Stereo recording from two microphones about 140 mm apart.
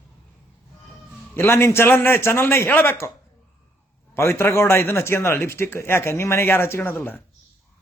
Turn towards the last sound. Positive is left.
turn(degrees=15)  # may be behind; listen again after turning